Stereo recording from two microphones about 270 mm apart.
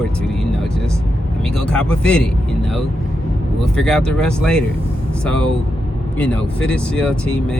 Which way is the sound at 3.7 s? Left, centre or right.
Centre.